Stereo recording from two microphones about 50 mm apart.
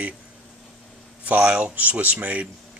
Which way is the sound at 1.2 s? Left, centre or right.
Right.